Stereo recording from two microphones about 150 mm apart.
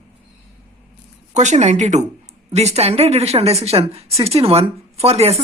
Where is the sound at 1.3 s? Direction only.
50° right (ahead or behind).